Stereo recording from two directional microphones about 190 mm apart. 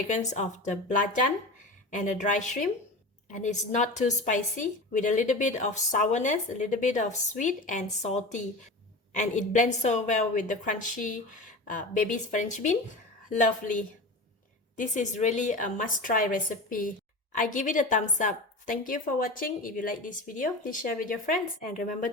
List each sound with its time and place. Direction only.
0.1 s a woman's voice: 40° left (ahead or behind)